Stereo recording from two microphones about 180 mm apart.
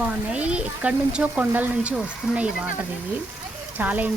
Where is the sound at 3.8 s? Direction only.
10° right (ahead or behind).